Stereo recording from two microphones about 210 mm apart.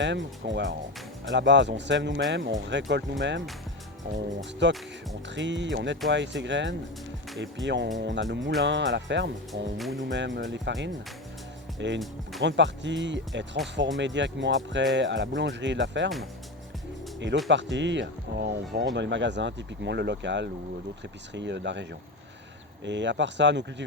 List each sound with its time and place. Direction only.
0.0 s speech: 60° right (ahead or behind)
17.5 s speech: 60° right (ahead or behind)